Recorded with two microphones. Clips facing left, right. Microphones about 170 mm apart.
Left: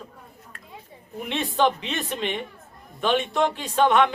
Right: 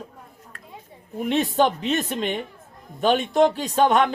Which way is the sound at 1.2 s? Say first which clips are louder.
Right 3 dB; 40° right (ahead or behind).